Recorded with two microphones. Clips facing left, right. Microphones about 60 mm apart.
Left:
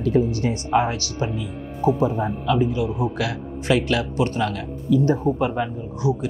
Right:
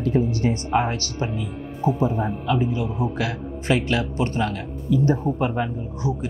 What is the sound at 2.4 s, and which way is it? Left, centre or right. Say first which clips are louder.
A man's voice: left 4 dB; right.